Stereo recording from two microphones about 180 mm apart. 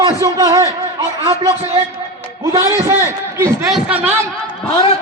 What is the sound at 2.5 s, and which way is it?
A man's voice, 15° right (ahead or behind).